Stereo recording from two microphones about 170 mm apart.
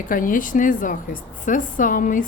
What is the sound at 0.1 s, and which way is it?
A woman's voice, 55° left (ahead or behind).